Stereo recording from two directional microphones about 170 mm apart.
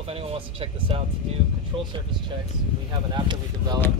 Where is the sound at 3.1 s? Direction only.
25° right (ahead or behind).